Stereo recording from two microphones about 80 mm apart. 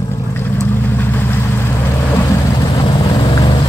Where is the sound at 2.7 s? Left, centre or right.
Left.